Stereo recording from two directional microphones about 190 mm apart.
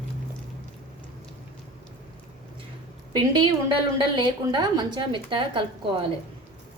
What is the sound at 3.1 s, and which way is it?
A woman's voice, 25° right (ahead or behind).